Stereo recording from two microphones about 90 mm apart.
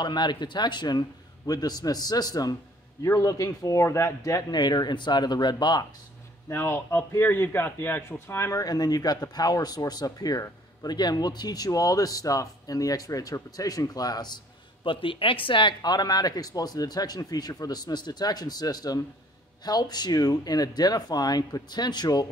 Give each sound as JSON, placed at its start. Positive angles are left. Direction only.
{"t": 0.0, "sound": "a man's voice", "side_deg": 55}
{"t": 4.6, "sound": "speech", "side_deg": 55}
{"t": 6.5, "sound": "a man's voice", "side_deg": 25}
{"t": 8.6, "sound": "speech", "side_deg": 45}